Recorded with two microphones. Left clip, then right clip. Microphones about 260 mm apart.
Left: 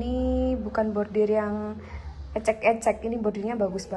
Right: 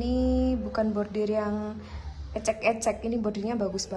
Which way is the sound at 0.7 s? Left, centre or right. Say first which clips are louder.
Left 2 dB; centre.